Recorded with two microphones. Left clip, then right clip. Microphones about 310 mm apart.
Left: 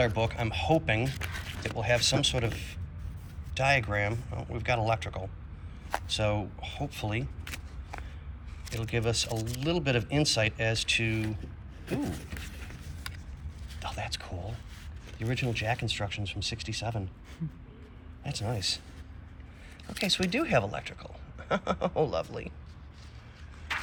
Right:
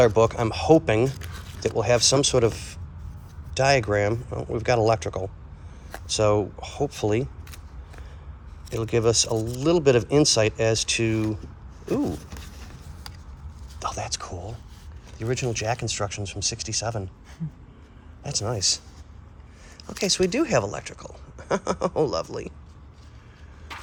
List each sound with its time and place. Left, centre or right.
0.0 s speech: centre
8.6 s speech: centre
13.7 s speech: centre
18.2 s speech: centre